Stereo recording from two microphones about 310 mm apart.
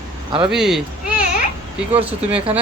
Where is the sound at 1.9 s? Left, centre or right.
Centre.